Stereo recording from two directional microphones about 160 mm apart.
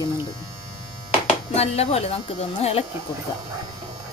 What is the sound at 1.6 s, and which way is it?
Speech, 40° left (ahead or behind).